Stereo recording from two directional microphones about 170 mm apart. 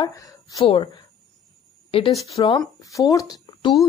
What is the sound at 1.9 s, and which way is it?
Speech, 35° left (ahead or behind).